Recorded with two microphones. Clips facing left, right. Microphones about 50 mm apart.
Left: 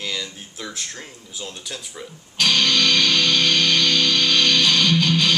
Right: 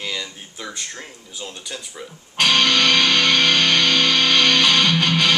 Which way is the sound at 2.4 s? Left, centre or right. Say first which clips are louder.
Right 2 dB; right.